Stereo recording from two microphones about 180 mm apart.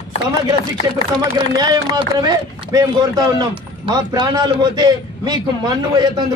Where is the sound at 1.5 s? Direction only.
20° right (ahead or behind).